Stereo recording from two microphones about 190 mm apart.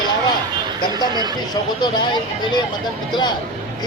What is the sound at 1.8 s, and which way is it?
Speech, 25° left (ahead or behind).